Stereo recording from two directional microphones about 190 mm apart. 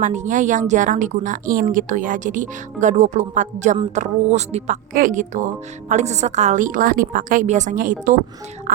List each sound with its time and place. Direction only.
0.0 s a woman's voice: 40° right (ahead or behind)